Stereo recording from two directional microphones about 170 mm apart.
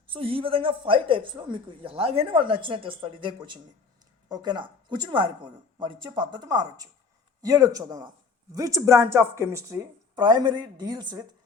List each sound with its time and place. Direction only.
0.1 s speech: 35° right (ahead or behind)